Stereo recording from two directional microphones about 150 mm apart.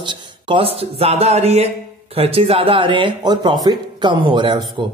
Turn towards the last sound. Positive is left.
turn(degrees=-30)  # may be behind; listen again after turning